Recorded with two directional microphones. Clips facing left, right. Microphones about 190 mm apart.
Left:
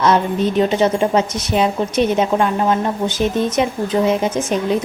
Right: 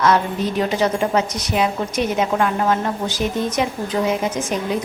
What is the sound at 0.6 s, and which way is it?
A woman's voice, 25° left (ahead or behind).